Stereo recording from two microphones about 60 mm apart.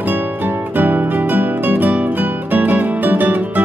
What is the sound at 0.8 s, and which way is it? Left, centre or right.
Music, right.